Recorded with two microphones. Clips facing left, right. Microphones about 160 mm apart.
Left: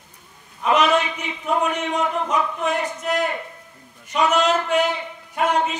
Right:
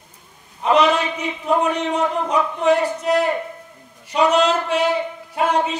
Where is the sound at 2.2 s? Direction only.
35° right (ahead or behind).